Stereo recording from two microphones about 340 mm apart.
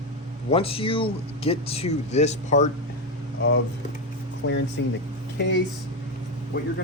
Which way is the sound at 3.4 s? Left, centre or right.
Left.